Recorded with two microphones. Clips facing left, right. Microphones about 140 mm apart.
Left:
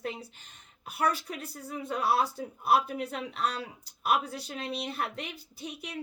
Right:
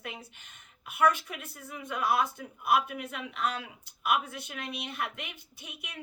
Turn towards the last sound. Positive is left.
turn(degrees=35)  # may be behind; listen again after turning